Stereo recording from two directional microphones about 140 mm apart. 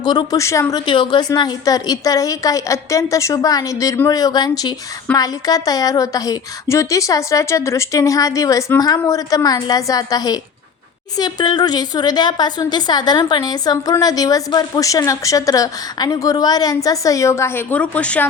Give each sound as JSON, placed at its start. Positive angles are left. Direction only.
{"t": 0.0, "sound": "a woman's voice", "side_deg": 30}
{"t": 0.9, "sound": "a woman's voice", "side_deg": 35}